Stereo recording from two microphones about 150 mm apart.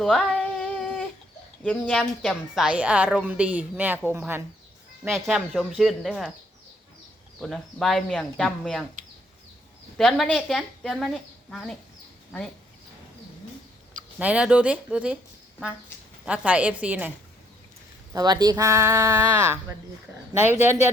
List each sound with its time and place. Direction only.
0.0 s a sound: centre (ahead or behind)
1.9 s speech: 5° left (ahead or behind)
2.6 s a woman's voice: 10° right (ahead or behind)
5.1 s speech: centre (ahead or behind)
7.3 s speech: centre (ahead or behind)
10.0 s speech: centre (ahead or behind)
14.2 s a woman's voice: 10° right (ahead or behind)
16.2 s a woman's voice: 10° right (ahead or behind)
18.1 s a woman's voice: 25° right (ahead or behind)